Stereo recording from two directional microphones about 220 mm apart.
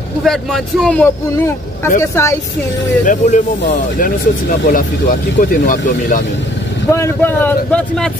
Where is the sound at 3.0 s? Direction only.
35° left (ahead or behind).